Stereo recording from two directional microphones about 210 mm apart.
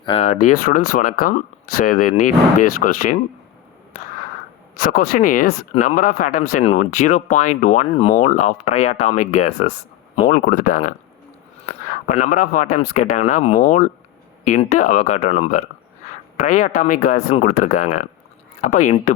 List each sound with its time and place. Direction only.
0.0 s speech: 30° left (ahead or behind)
0.4 s speech: 40° left (ahead or behind)
4.8 s speech: 45° left (ahead or behind)
11.9 s speech: 40° left (ahead or behind)